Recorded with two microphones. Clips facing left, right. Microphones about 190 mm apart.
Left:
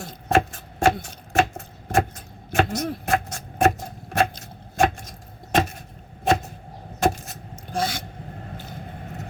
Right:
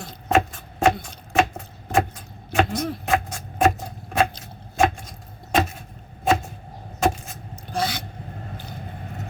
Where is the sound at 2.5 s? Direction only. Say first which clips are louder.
Even; 45° left (ahead or behind).